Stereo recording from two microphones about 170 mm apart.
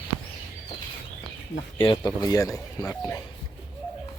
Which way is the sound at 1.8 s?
30° left (ahead or behind).